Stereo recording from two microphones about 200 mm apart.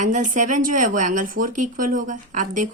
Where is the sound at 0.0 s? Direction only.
40° right (ahead or behind).